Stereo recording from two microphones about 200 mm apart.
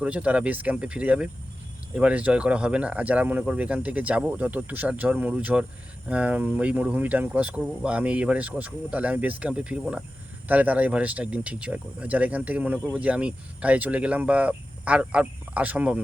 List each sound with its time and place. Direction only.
0.0 s speech: 5° right (ahead or behind)